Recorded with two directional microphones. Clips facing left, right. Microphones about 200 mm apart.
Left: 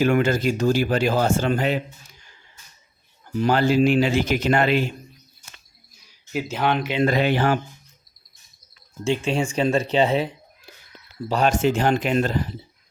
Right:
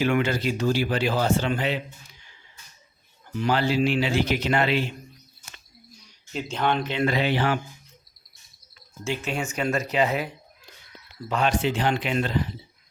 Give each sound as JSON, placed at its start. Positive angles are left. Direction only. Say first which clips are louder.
{"t": 0.0, "sound": "speech", "louder": "left 4 dB", "side_deg": 45}
{"t": 3.3, "sound": "speech", "louder": "left 4 dB", "side_deg": 45}
{"t": 6.0, "sound": "speech", "louder": "left 5 dB", "side_deg": 5}
{"t": 7.0, "sound": "speech", "louder": "left 5 dB", "side_deg": 45}
{"t": 9.2, "sound": "speech", "louder": "left 4 dB", "side_deg": 30}